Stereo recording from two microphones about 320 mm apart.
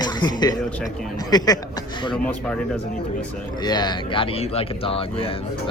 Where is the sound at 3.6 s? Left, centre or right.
Centre.